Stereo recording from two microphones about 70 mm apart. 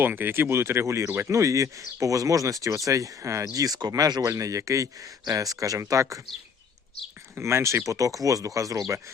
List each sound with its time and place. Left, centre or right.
0.0 s speech: right
1.3 s speech: right
3.4 s speech: right
7.3 s speech: right